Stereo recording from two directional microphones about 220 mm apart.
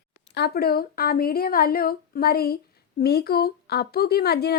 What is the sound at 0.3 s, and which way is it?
Speech, 45° left (ahead or behind).